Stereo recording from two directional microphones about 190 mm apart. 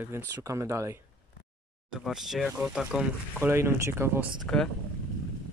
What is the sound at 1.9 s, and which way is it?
Speech, centre (ahead or behind).